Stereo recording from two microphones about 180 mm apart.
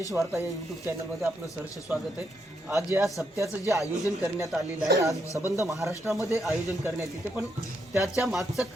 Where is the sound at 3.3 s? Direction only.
15° right (ahead or behind).